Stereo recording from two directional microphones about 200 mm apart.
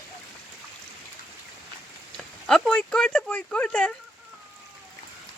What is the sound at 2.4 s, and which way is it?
Speech, 5° left (ahead or behind).